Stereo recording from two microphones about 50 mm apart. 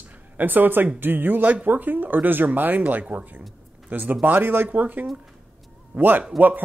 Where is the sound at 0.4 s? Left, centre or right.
Right.